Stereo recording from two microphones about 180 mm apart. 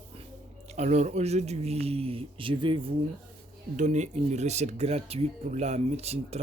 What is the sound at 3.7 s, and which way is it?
Speech, 40° right (ahead or behind).